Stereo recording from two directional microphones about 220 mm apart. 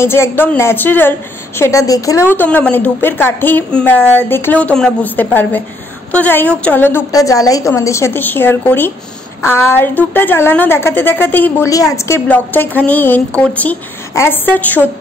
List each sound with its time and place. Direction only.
0.0 s a woman's voice: 10° left (ahead or behind)